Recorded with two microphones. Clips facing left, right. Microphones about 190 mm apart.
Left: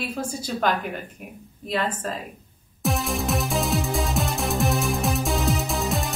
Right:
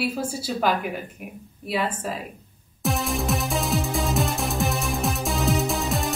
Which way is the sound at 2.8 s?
Centre (ahead or behind).